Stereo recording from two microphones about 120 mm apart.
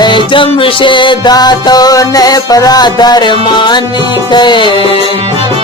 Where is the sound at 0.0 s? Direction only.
40° left (ahead or behind).